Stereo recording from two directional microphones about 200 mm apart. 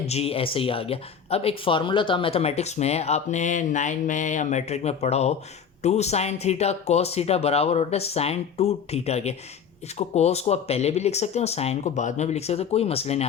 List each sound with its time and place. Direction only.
0.0 s speech: 30° left (ahead or behind)